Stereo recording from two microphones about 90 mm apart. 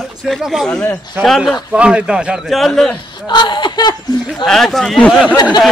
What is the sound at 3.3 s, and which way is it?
Speech, 55° left (ahead or behind).